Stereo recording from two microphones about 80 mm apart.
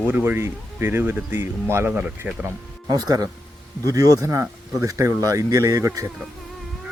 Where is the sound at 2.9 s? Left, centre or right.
Right.